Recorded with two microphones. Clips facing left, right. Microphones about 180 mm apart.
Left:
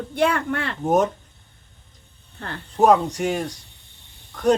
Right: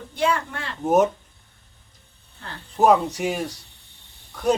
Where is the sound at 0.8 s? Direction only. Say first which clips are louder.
Right 1 dB; 5° right (ahead or behind).